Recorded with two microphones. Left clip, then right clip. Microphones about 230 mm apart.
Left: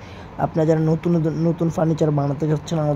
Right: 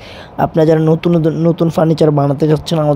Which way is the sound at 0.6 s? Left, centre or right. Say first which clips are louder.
Right 9 dB; right.